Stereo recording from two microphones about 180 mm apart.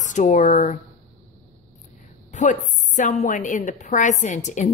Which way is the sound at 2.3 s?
40° left (ahead or behind).